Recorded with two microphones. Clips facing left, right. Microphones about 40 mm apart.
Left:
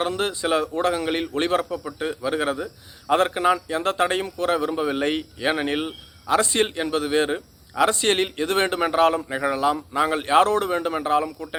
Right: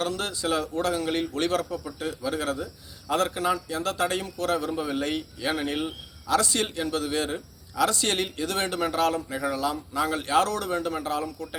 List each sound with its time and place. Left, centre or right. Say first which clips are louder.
0.0 s a man's voice: left 4 dB; left